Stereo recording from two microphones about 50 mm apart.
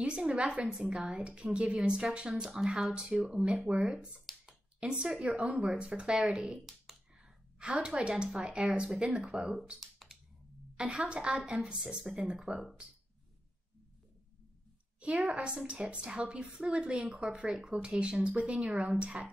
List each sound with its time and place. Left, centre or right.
0.0 s speech: centre
0.7 s speech: centre
2.4 s speech: centre
4.5 s a sound: centre
5.3 s speech: right
7.5 s speech: right
9.8 s typing: centre
10.8 s speech: centre
11.8 s speech: centre
15.0 s speech: right